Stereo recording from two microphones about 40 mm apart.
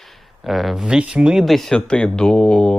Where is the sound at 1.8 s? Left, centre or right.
Left.